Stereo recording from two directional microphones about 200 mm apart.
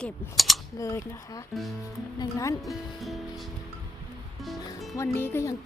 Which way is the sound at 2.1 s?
15° left (ahead or behind).